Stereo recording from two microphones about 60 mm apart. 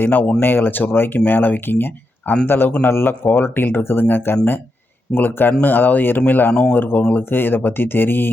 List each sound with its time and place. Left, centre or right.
0.0 s speech: left
6.5 s speech: centre
6.7 s speech: left